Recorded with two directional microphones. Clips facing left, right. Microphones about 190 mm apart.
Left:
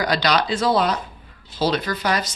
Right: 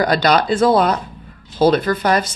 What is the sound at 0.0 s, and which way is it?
Speech, 50° right (ahead or behind).